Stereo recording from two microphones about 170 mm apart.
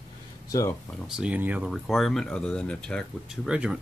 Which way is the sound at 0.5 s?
20° left (ahead or behind).